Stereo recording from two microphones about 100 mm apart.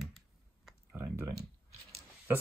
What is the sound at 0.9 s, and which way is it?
Speech, 25° right (ahead or behind).